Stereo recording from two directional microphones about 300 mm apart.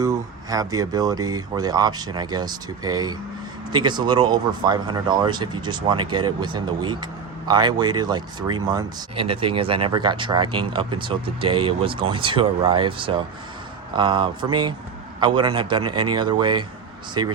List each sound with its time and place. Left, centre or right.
0.0 s speech: centre